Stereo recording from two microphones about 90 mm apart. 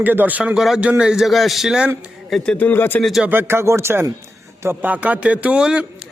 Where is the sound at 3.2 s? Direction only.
25° right (ahead or behind).